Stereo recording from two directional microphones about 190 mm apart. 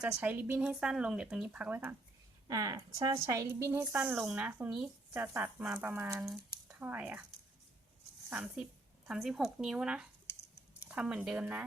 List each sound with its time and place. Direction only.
0.0 s a woman's voice: 5° right (ahead or behind)
8.3 s a woman's voice: 10° right (ahead or behind)